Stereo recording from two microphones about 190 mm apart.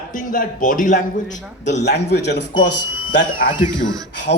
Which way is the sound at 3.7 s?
20° right (ahead or behind).